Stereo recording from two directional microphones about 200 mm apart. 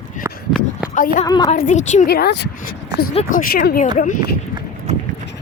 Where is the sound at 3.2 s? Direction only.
40° left (ahead or behind).